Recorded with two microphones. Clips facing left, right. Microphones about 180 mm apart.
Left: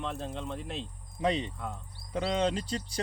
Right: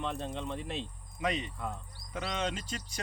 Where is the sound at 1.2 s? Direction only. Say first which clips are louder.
Left 4 dB; 30° left (ahead or behind).